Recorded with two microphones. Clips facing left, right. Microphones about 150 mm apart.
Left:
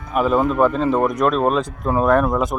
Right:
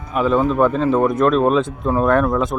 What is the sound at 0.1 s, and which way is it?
A man's voice, 5° left (ahead or behind).